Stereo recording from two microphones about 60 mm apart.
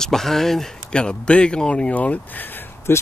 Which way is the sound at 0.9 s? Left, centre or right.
Centre.